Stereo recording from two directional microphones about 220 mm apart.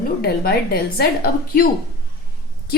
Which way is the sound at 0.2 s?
45° left (ahead or behind).